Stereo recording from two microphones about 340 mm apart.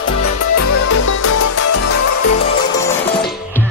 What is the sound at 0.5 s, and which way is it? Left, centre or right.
Music, left.